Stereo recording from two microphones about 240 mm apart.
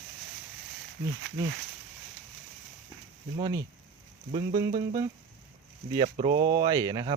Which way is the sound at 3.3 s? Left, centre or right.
Centre.